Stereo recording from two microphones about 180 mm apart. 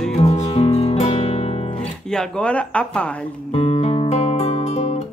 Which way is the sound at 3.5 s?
30° left (ahead or behind).